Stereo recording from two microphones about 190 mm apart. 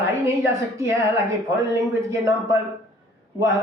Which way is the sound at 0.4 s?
15° right (ahead or behind).